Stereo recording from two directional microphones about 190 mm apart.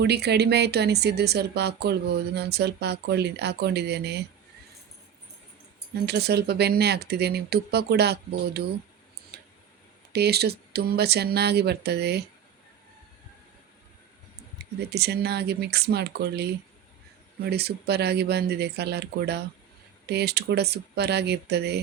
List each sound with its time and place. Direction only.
0.0 s speech: 60° right (ahead or behind)
5.9 s speech: 60° right (ahead or behind)
9.3 s tick: 55° right (ahead or behind)
10.1 s speech: 60° right (ahead or behind)
14.6 s speech: 60° right (ahead or behind)